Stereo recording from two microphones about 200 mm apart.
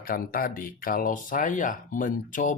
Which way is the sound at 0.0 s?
45° left (ahead or behind).